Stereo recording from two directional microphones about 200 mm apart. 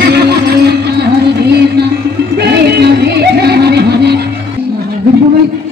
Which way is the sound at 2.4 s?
55° right (ahead or behind).